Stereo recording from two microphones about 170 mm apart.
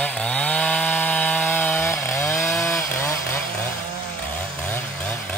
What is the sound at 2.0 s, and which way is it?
Chainsaw, 15° left (ahead or behind).